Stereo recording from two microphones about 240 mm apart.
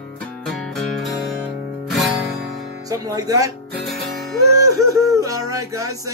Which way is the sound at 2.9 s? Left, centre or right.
Centre.